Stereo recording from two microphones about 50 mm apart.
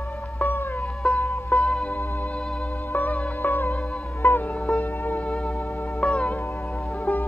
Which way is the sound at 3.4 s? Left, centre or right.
Left.